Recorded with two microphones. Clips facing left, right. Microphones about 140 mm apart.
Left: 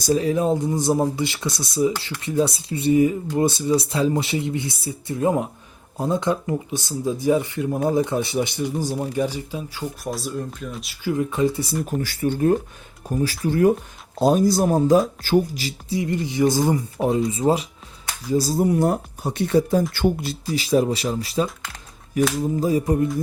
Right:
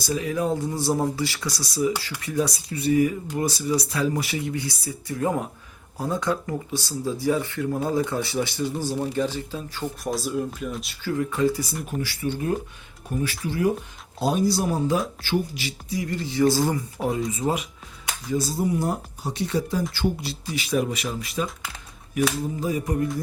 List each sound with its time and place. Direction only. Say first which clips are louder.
0.0 s speech: left 7 dB; 35° left (ahead or behind)
0.3 s speech: left 4 dB; 20° left (ahead or behind); by 10.9 s centre (ahead or behind)
11.0 s speech: left 2 dB; 20° left (ahead or behind)
11.9 s speech: left 3 dB; 50° left (ahead or behind)
16.0 s speech: left 2 dB; 20° left (ahead or behind); by 18.6 s 35° left (ahead or behind)
18.7 s speech: left 6 dB; 55° left (ahead or behind)
20.5 s speech: left 5 dB; 35° left (ahead or behind)
22.6 s speech: left 6 dB; 35° left (ahead or behind)